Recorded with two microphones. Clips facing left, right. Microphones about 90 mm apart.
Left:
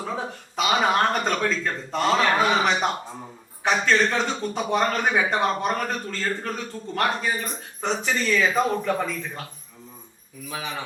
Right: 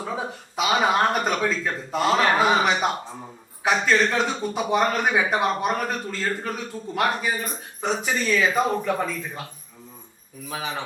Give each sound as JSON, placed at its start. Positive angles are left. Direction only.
{"t": 0.0, "sound": "a man's voice", "side_deg": -5}
{"t": 10.5, "sound": "speech", "side_deg": -35}